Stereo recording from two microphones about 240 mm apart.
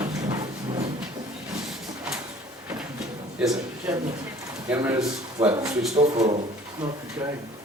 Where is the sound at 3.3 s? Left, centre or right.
Centre.